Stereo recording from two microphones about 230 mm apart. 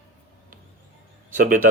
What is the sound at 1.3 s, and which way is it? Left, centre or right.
Speech, right.